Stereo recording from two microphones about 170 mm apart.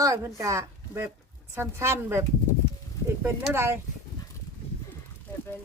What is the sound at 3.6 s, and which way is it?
Speech, 15° right (ahead or behind).